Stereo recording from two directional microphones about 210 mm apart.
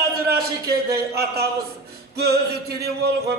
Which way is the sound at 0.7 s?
50° right (ahead or behind).